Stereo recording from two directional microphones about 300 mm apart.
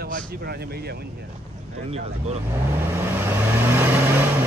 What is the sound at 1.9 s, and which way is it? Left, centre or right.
Speech, right.